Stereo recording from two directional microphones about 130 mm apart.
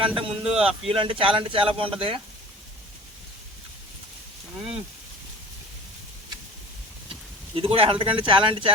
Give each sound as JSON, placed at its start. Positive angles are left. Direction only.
{"t": 0.2, "sound": "a man's voice", "side_deg": -45}
{"t": 7.1, "sound": "speech", "side_deg": -45}